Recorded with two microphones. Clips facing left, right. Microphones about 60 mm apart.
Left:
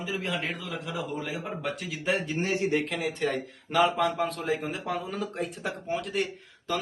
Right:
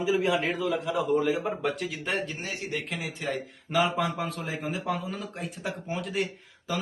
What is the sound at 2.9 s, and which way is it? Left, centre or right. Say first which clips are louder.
A man's voice: left 4 dB; centre.